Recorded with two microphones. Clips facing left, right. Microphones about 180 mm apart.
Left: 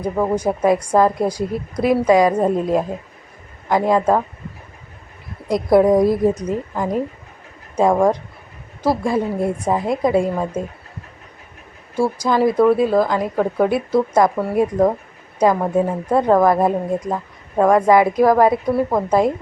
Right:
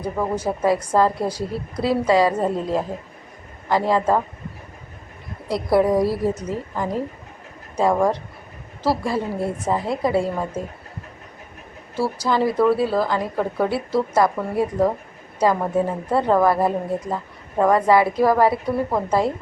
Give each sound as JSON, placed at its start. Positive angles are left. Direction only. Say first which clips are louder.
{"t": 0.0, "sound": "a woman's voice", "louder": "left 5 dB", "side_deg": 15}
{"t": 5.5, "sound": "a woman's voice", "louder": "left 5 dB", "side_deg": 20}
{"t": 11.9, "sound": "a woman's voice", "louder": "left 3 dB", "side_deg": 15}